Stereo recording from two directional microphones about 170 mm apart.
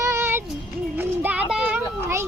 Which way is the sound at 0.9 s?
10° right (ahead or behind).